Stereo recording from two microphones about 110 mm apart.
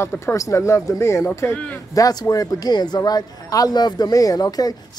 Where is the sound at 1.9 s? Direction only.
35° left (ahead or behind).